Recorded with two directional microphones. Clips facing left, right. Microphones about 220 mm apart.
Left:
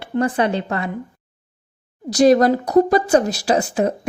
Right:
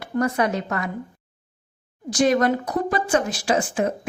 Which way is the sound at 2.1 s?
35° left (ahead or behind).